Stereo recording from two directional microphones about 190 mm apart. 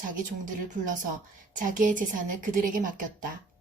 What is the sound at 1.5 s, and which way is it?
A woman's voice, 45° right (ahead or behind).